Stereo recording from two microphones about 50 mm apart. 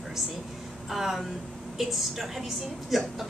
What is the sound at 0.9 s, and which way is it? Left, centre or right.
A woman's voice, centre.